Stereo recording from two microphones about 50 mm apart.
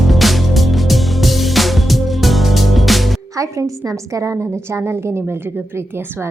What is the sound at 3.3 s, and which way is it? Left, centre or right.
A woman's voice, right.